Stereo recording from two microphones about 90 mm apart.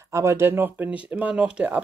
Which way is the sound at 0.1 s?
30° right (ahead or behind).